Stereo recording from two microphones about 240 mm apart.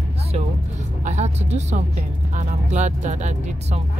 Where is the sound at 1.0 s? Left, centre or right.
Right.